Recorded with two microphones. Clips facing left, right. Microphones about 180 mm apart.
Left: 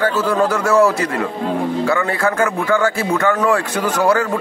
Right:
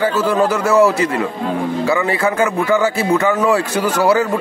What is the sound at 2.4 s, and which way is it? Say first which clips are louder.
Speech: right 2 dB; 15° right (ahead or behind).